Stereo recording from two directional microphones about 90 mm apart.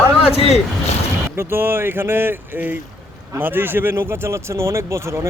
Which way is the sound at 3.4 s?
25° right (ahead or behind).